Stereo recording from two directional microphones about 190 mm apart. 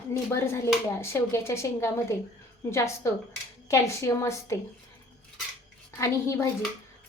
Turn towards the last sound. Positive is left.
turn(degrees=15)  # may be behind; listen again after turning